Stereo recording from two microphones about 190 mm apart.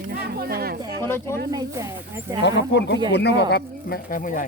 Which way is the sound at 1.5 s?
20° right (ahead or behind).